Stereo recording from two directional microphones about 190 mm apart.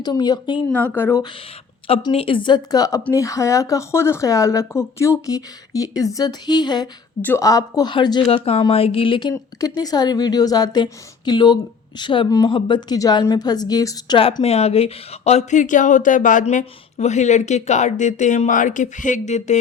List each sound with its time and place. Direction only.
0.0 s speech: 20° left (ahead or behind)
0.7 s speech: 10° left (ahead or behind)
1.9 s a woman's voice: 25° left (ahead or behind)